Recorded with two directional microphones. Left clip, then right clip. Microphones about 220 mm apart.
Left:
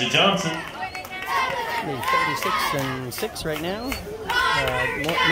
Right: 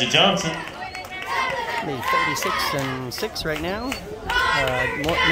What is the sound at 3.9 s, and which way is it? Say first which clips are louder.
Speech: left 1 dB; 40° right (ahead or behind).